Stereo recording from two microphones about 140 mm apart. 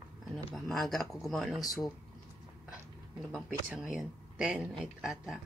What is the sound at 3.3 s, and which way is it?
Speech, 5° right (ahead or behind).